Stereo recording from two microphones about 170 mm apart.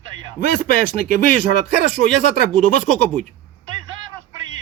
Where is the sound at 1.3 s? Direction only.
50° left (ahead or behind).